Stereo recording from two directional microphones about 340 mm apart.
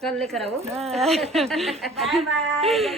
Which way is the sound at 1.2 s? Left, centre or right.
Centre.